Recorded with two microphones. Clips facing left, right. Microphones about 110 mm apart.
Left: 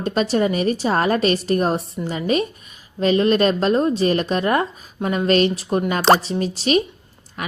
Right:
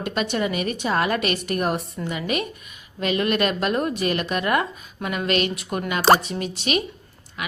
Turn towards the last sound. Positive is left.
turn(degrees=40)  # may be behind; listen again after turning